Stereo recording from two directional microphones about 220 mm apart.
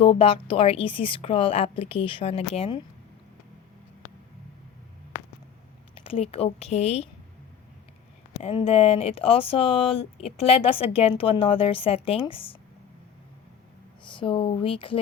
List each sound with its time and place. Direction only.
0.0 s speech: 25° left (ahead or behind)
5.9 s speech: 25° left (ahead or behind)
8.4 s speech: 25° left (ahead or behind)
14.1 s speech: 25° left (ahead or behind)